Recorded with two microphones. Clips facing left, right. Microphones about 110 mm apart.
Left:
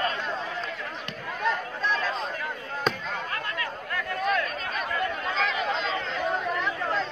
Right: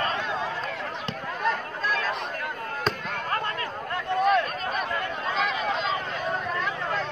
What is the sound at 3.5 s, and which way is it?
Chatter, 30° right (ahead or behind).